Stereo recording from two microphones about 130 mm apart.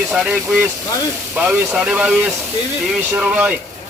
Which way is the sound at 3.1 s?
10° right (ahead or behind).